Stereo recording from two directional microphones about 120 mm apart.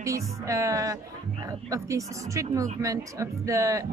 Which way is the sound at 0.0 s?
25° right (ahead or behind).